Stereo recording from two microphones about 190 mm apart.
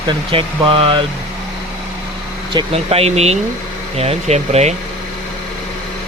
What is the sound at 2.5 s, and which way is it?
Speech, 25° right (ahead or behind).